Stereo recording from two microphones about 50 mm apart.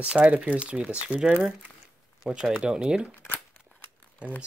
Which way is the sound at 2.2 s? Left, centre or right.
Centre.